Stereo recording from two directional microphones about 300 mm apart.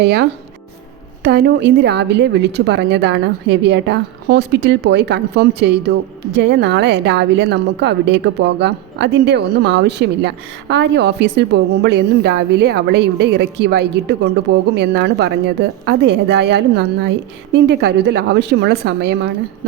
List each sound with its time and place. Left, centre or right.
0.0 s a woman's voice: right